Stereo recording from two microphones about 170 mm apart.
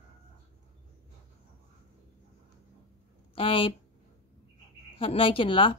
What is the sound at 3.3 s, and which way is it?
Speech, 30° left (ahead or behind).